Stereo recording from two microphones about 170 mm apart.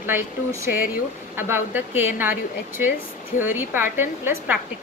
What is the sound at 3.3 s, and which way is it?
Speech, 50° left (ahead or behind).